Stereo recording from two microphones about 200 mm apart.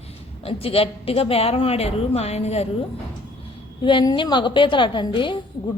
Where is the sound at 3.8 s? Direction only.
25° left (ahead or behind).